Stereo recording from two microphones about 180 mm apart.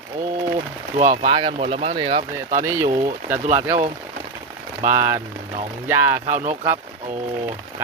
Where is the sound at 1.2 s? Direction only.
30° right (ahead or behind).